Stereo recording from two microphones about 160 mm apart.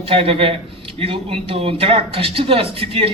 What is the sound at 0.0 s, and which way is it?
A man's voice, 35° right (ahead or behind).